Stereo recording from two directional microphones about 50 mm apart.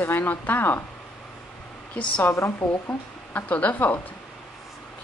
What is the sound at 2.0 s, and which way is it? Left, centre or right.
Speech, left.